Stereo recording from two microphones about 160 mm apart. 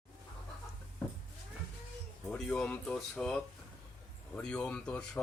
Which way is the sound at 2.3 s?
5° left (ahead or behind).